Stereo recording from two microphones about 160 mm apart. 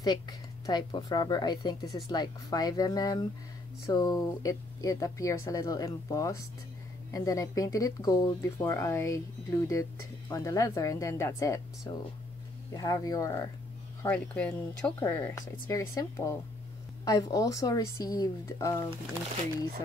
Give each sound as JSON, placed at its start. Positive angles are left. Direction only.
{"t": 0.0, "sound": "speech", "side_deg": 25}
{"t": 14.0, "sound": "speech", "side_deg": 10}